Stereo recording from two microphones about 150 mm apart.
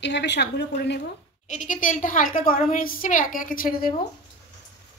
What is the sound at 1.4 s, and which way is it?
A woman's voice, 55° left (ahead or behind).